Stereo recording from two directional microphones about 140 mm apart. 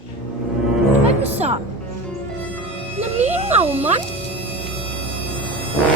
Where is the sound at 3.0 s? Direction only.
50° right (ahead or behind).